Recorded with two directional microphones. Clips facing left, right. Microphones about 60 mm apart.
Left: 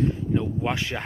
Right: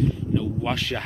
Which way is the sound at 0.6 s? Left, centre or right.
Centre.